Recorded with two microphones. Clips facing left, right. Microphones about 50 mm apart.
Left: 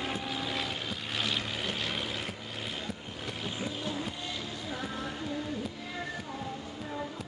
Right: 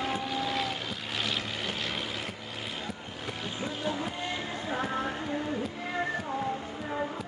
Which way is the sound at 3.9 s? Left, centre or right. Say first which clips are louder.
Right 4 dB; centre.